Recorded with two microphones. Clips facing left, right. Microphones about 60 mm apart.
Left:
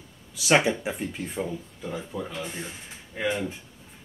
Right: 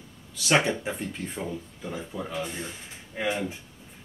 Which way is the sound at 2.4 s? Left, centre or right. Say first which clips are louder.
Right 1 dB; centre.